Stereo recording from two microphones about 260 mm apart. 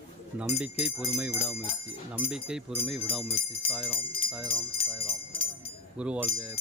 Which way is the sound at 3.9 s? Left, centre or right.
Left.